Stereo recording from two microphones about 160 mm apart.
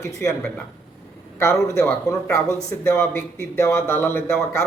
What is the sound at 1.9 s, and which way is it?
A man's voice, 15° left (ahead or behind).